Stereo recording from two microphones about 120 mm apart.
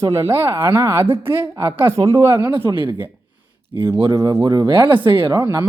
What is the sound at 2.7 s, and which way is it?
Speech, 40° right (ahead or behind).